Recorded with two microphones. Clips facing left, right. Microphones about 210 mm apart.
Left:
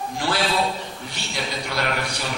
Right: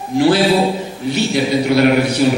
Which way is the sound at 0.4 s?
35° right (ahead or behind).